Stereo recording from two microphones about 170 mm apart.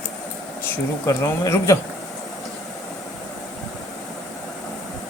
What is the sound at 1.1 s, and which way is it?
Speech, 15° left (ahead or behind).